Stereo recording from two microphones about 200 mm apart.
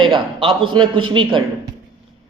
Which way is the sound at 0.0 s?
25° right (ahead or behind).